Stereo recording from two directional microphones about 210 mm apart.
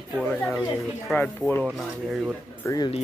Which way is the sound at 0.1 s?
5° left (ahead or behind).